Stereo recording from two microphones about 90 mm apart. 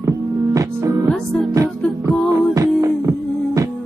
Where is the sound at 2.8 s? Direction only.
35° right (ahead or behind).